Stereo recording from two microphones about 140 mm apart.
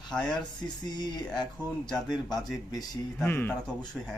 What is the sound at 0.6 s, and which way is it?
Speech, 30° left (ahead or behind).